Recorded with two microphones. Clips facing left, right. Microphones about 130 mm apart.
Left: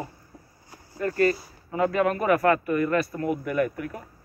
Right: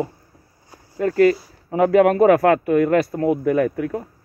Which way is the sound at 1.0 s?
90° right.